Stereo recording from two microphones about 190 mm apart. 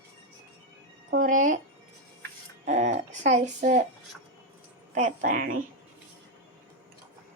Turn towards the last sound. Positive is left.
turn(degrees=-45)  # may be behind; listen again after turning